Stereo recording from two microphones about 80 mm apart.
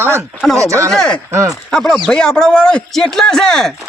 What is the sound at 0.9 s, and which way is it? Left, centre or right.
Speech, centre.